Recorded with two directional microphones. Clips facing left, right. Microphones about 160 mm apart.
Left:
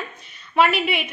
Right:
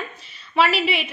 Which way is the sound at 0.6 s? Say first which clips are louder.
Even; 55° left (ahead or behind).